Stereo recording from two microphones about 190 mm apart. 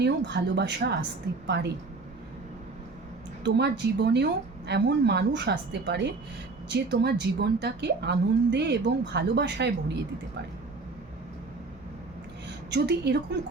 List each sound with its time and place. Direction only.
0.0 s a woman's voice: 65° right (ahead or behind)
3.4 s a woman's voice: 60° right (ahead or behind)
12.7 s a woman's voice: 60° right (ahead or behind)